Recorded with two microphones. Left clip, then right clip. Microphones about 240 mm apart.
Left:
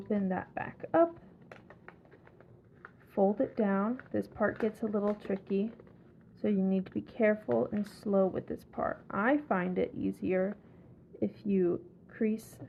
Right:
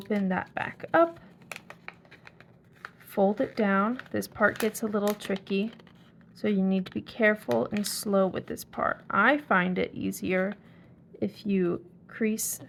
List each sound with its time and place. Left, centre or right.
0.1 s speech: right
1.5 s a sound: right
3.2 s a woman's voice: right